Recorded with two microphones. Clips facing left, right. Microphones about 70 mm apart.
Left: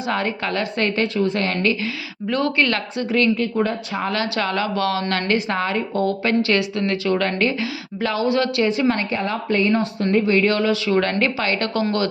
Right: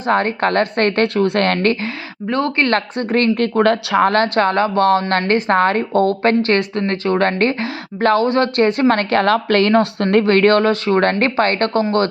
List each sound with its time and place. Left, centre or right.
0.1 s a woman's voice: right
2.3 s a woman's voice: right
11.8 s speech: right